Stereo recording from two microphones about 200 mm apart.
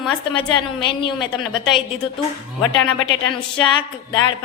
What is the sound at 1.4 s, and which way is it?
Speech, centre (ahead or behind).